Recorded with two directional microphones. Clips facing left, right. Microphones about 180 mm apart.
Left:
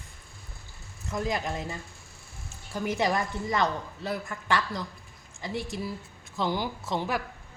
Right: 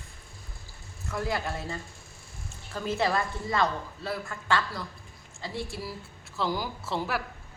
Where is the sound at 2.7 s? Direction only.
15° left (ahead or behind).